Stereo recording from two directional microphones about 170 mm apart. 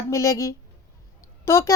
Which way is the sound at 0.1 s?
20° left (ahead or behind).